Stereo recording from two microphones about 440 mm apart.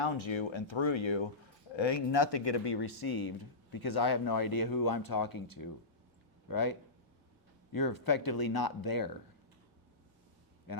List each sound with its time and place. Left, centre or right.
0.0 s speech: left
10.7 s a man's voice: left